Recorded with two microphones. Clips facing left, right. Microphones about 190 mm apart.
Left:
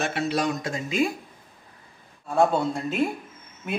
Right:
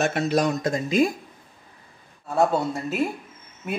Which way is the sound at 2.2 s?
5° right (ahead or behind).